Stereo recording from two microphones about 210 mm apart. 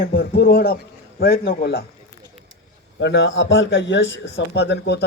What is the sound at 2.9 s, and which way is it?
A man's voice, 60° left (ahead or behind).